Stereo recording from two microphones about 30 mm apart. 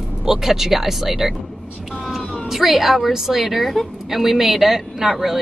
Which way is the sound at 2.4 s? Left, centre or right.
Centre.